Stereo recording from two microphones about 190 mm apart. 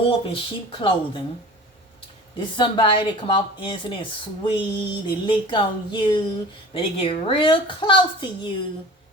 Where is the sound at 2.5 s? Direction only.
25° left (ahead or behind).